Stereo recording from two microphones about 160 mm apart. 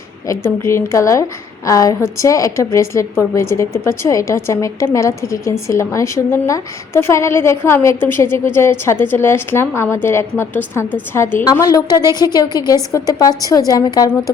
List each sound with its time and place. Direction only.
0.3 s a woman's voice: 15° left (ahead or behind)
11.7 s a woman's voice: 25° left (ahead or behind)